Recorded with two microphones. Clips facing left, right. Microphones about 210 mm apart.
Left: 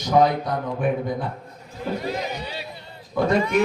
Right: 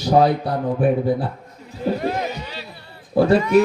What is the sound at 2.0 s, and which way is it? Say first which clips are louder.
Speech: right 4 dB; 55° right (ahead or behind).